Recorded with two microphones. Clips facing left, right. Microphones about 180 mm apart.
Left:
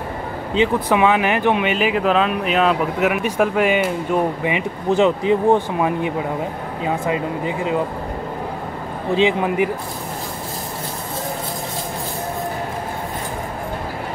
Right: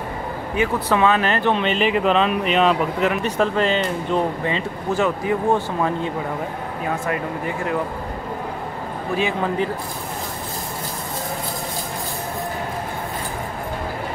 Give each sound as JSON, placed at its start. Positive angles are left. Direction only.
{"t": 0.6, "sound": "speech", "side_deg": 15}
{"t": 9.1, "sound": "speech", "side_deg": 15}